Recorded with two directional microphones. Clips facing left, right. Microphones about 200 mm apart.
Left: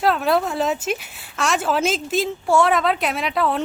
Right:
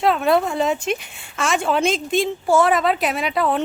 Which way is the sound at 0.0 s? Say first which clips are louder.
Right 2 dB; centre (ahead or behind).